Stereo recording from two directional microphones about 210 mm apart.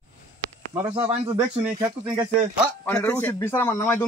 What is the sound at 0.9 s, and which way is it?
Speech, 25° right (ahead or behind).